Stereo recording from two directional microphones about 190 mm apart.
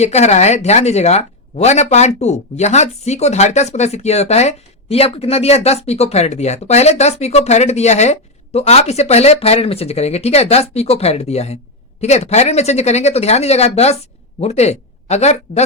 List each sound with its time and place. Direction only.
0.0 s speech: 35° left (ahead or behind)